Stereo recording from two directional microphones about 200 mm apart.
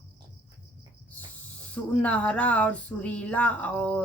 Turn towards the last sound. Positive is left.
turn(degrees=5)  # may be behind; listen again after turning